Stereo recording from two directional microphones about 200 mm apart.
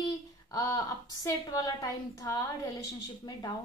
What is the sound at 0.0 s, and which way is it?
A woman's voice, 20° left (ahead or behind).